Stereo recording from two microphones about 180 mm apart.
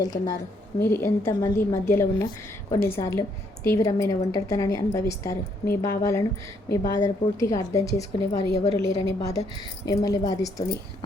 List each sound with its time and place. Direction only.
0.0 s a woman's voice: 20° left (ahead or behind)